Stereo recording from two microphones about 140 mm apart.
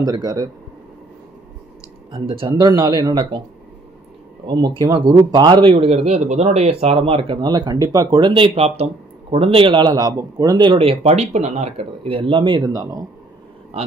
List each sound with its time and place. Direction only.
0.0 s speech: 25° right (ahead or behind)
2.1 s a man's voice: 35° right (ahead or behind)
4.5 s a man's voice: 25° right (ahead or behind)
13.7 s speech: 45° right (ahead or behind)